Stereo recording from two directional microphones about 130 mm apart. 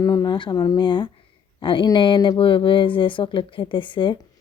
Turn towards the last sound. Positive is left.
turn(degrees=40)  # may be behind; listen again after turning